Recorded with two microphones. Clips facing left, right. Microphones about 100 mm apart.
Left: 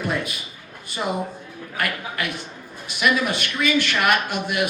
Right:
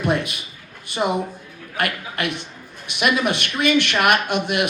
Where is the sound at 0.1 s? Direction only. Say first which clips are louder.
Right 6 dB; 70° right (ahead or behind).